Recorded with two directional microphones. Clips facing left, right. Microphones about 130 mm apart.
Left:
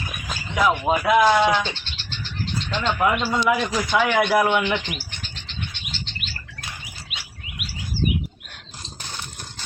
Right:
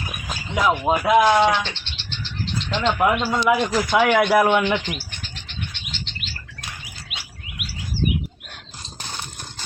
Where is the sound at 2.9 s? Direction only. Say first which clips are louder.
Right 1 dB; 5° right (ahead or behind).